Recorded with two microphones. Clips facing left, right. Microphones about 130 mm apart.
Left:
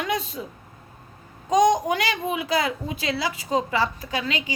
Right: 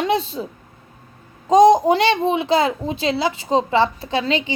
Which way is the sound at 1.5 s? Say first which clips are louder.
Right 7 dB; 30° right (ahead or behind).